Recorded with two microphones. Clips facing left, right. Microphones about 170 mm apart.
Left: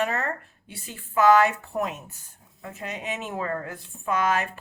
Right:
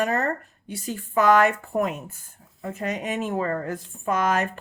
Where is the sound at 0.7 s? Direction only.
45° right (ahead or behind).